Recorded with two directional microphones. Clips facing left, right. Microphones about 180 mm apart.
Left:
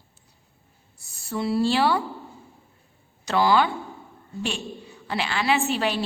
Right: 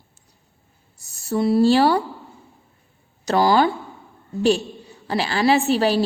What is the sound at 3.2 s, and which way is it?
Speech, 40° right (ahead or behind).